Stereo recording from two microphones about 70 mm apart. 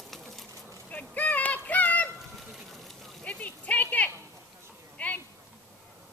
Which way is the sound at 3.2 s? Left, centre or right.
Centre.